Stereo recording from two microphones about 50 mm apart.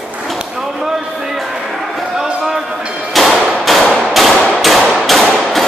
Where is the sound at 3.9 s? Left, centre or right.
Centre.